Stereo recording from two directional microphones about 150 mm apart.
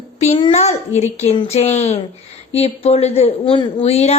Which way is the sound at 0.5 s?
50° left (ahead or behind).